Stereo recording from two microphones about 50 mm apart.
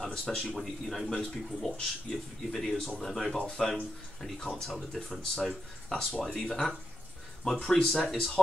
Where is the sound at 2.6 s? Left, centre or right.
Centre.